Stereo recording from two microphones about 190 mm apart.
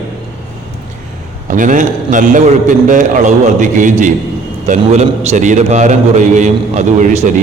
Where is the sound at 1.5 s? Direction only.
45° right (ahead or behind).